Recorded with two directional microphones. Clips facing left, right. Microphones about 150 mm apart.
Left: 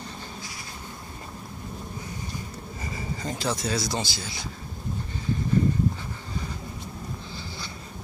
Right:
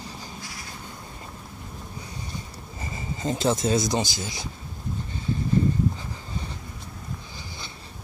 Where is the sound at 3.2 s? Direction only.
25° right (ahead or behind).